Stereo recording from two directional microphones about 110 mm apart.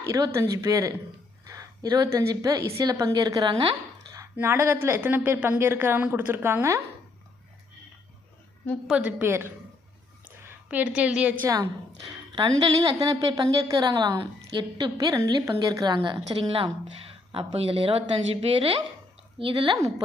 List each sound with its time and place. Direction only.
0.0 s speech: 30° right (ahead or behind); by 3.8 s 45° right (ahead or behind)
4.4 s a woman's voice: 25° right (ahead or behind)
8.9 s a woman's voice: 10° right (ahead or behind)
10.2 s a sound: 15° right (ahead or behind)
11.4 s a woman's voice: 30° right (ahead or behind)
12.0 s speech: 45° right (ahead or behind)
14.9 s speech: 30° right (ahead or behind)
16.3 s a woman's voice: 55° right (ahead or behind)